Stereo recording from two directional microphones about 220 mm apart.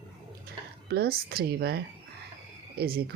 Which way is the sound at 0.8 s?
45° right (ahead or behind).